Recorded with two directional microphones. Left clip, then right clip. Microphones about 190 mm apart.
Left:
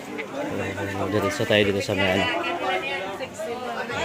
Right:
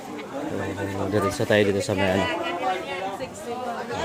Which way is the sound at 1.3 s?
10° right (ahead or behind).